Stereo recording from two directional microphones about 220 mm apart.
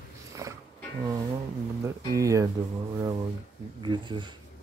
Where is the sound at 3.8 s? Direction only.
20° right (ahead or behind).